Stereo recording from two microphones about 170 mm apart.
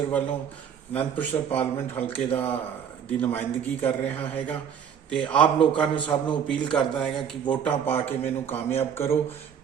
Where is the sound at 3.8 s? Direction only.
10° left (ahead or behind).